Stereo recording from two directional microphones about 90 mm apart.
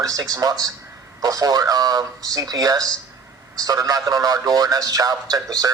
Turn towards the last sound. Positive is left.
turn(degrees=-45)  # may be behind; listen again after turning